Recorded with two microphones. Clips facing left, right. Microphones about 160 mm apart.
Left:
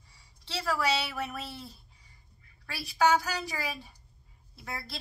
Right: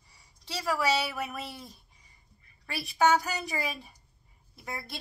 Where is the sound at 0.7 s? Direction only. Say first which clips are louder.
Right 2 dB; 10° right (ahead or behind).